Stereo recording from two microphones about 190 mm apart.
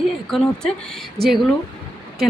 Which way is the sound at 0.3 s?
Centre (ahead or behind).